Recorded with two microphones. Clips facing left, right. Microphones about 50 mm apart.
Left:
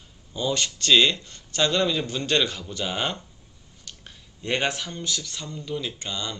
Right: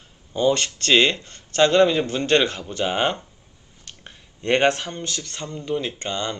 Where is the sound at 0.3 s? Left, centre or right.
Right.